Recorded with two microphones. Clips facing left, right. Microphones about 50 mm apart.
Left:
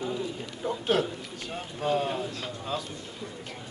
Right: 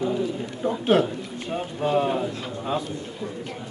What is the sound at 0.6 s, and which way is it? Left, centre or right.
Speech, right.